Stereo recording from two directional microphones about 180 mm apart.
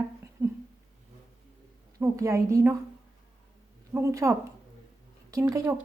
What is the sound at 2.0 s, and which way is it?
Speech, 15° right (ahead or behind).